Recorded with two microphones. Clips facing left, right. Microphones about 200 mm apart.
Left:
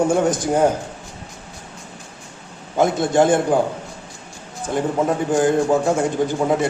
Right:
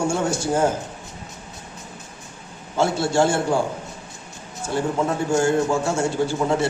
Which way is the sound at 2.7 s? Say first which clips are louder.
Left 3 dB; 20° left (ahead or behind).